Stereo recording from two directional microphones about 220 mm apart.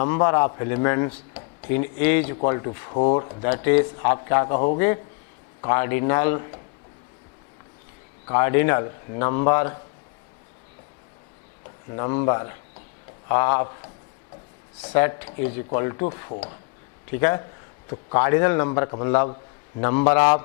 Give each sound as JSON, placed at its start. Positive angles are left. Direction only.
{"t": 0.0, "sound": "a man's voice", "side_deg": 15}
{"t": 2.9, "sound": "speech", "side_deg": 35}
{"t": 3.2, "sound": "speech", "side_deg": 25}
{"t": 3.6, "sound": "a man's voice", "side_deg": 15}
{"t": 5.6, "sound": "a man's voice", "side_deg": 15}
{"t": 8.3, "sound": "a man's voice", "side_deg": 15}
{"t": 11.9, "sound": "a man's voice", "side_deg": 20}
{"t": 14.9, "sound": "a man's voice", "side_deg": 15}
{"t": 17.1, "sound": "a man's voice", "side_deg": 15}